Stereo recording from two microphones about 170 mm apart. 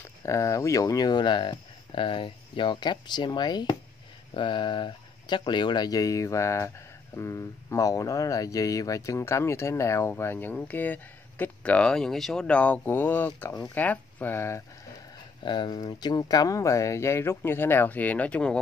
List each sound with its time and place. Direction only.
0.2 s speech: 20° left (ahead or behind)
15.4 s speech: 25° left (ahead or behind); by 18.6 s 5° left (ahead or behind)